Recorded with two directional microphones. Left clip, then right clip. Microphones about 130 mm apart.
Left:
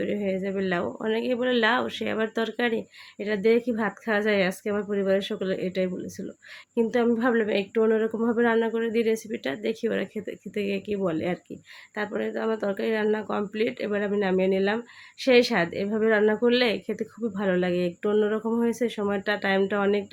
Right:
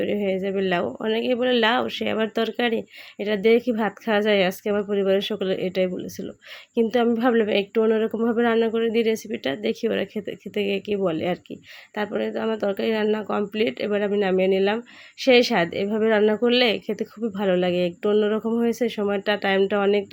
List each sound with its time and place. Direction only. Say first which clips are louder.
0.0 s a woman's voice: right 4 dB; 35° right (ahead or behind)